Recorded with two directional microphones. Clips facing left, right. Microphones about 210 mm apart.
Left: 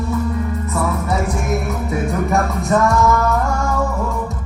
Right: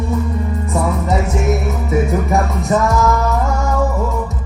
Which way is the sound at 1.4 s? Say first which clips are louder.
Right 3 dB; centre (ahead or behind).